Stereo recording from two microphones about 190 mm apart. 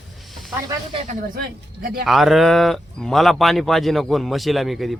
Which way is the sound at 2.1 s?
Centre (ahead or behind).